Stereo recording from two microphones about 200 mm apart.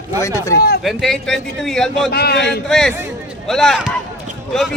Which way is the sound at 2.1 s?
50° left (ahead or behind).